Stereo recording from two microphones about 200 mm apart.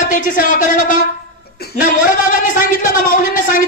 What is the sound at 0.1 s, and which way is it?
A man's voice, 40° left (ahead or behind).